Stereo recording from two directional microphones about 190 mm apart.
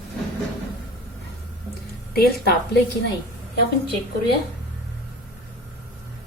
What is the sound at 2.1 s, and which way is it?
Speech, 55° left (ahead or behind).